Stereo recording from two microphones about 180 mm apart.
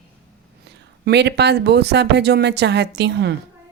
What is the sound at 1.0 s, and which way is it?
Speech, 70° right (ahead or behind).